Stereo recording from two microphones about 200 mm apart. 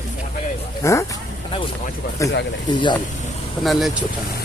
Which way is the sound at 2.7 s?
20° left (ahead or behind).